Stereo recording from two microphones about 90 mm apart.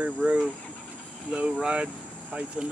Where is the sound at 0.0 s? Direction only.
15° right (ahead or behind).